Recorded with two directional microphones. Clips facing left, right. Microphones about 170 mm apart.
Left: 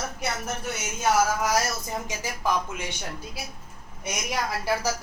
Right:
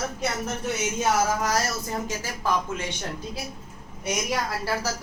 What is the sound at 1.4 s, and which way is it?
Speech, 10° left (ahead or behind).